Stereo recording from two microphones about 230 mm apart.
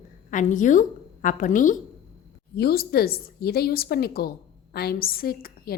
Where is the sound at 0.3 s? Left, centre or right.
Left.